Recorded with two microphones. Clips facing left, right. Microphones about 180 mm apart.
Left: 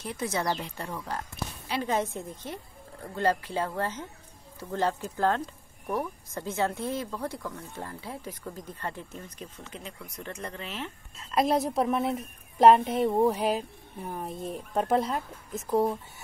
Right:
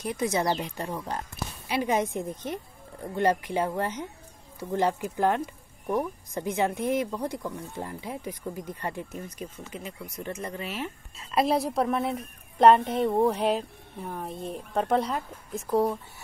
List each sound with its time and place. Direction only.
0.0 s speech: 15° right (ahead or behind); by 16.0 s centre (ahead or behind)